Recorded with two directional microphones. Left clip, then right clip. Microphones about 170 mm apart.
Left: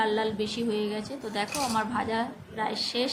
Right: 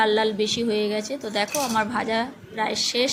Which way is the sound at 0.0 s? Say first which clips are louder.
Right 6 dB; 15° right (ahead or behind).